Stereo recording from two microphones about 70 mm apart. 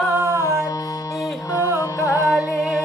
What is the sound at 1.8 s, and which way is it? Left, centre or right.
Music, left.